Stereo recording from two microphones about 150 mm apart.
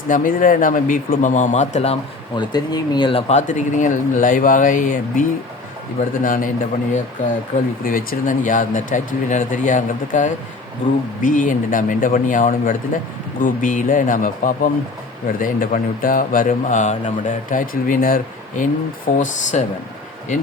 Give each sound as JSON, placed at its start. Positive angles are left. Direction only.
{"t": 0.1, "sound": "speech", "side_deg": 60}
{"t": 2.3, "sound": "speech", "side_deg": 30}
{"t": 7.5, "sound": "speech", "side_deg": 55}